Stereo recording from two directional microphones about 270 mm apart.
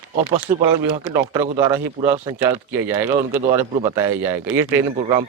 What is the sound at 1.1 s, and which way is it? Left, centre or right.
Speech, centre.